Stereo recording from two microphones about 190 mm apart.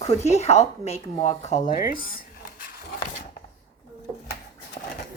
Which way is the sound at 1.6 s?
50° left (ahead or behind).